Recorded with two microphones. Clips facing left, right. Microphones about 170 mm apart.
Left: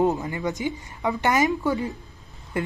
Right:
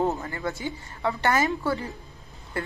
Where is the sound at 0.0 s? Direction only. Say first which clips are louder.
Left 4 dB; 15° left (ahead or behind).